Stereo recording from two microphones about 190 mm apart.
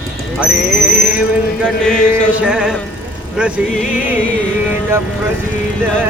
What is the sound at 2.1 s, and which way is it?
Speech, 5° right (ahead or behind).